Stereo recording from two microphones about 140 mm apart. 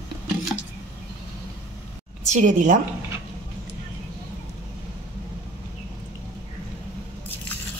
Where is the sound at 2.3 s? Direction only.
60° right (ahead or behind).